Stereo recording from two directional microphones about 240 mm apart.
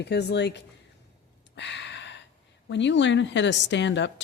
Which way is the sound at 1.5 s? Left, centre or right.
Left.